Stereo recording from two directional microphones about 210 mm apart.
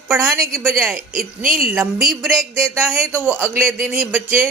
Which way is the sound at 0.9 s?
40° right (ahead or behind).